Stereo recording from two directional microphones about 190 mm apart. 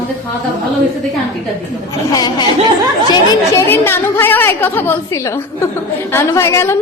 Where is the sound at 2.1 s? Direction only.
20° left (ahead or behind).